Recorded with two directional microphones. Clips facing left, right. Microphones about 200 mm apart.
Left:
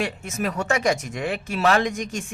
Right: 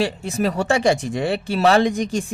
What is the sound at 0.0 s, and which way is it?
Speech, 30° right (ahead or behind).